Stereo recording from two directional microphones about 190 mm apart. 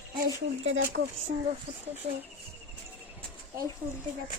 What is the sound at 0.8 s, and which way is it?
Speech, 50° right (ahead or behind).